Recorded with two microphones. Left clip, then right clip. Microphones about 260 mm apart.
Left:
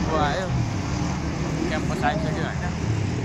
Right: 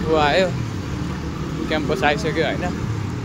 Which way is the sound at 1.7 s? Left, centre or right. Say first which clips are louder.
Right 7 dB; right.